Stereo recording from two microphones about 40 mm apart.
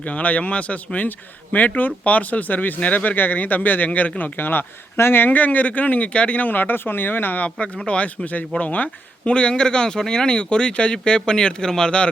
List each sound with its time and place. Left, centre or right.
0.0 s speech: left
4.2 s speech: left
6.4 s speech: left
7.8 s speech: left
9.3 s speech: left